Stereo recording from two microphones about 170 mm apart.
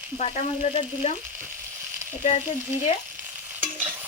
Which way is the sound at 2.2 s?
40° left (ahead or behind).